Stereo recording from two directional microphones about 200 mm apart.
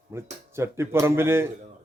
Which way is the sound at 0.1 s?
15° right (ahead or behind).